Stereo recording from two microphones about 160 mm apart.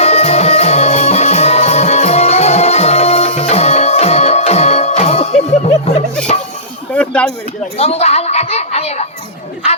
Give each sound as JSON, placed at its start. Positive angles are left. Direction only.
{"t": 0.0, "sound": "music", "side_deg": 40}
{"t": 6.9, "sound": "a sound", "side_deg": 10}
{"t": 7.8, "sound": "a child's voice", "side_deg": 40}